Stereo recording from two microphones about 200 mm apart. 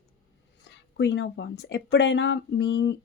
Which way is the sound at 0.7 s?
60° left (ahead or behind).